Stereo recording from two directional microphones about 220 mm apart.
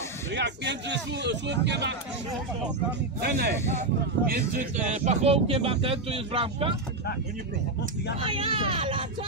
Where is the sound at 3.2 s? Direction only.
45° right (ahead or behind).